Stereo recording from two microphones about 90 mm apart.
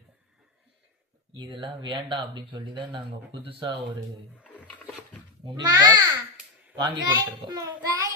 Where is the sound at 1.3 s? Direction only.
60° right (ahead or behind).